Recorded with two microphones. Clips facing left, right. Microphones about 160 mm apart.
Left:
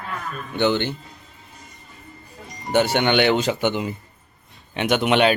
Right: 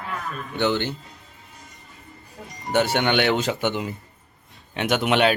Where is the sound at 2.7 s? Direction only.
Centre (ahead or behind).